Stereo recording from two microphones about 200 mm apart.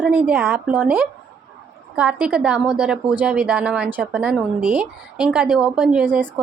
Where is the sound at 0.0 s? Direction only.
10° right (ahead or behind).